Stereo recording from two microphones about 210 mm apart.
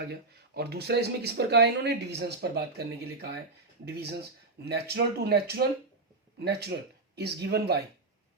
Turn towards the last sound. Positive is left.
turn(degrees=-50)  # may be behind; listen again after turning